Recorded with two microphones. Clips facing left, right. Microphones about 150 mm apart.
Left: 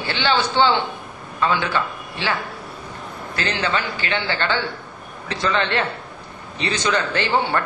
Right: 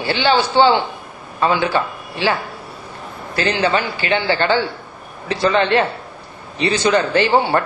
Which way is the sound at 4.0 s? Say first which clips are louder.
Right 6 dB; 10° right (ahead or behind).